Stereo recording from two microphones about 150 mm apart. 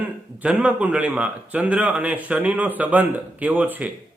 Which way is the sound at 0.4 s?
10° right (ahead or behind).